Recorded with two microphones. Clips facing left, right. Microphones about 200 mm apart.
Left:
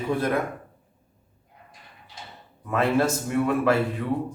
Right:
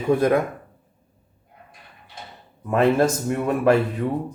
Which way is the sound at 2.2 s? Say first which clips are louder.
Right 3 dB; 55° right (ahead or behind).